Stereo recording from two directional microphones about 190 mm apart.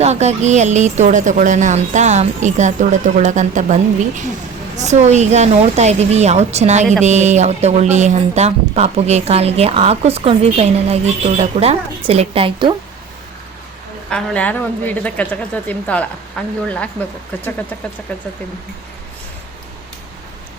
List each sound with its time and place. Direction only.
0.0 s speech: 35° right (ahead or behind)
14.1 s speech: 5° left (ahead or behind)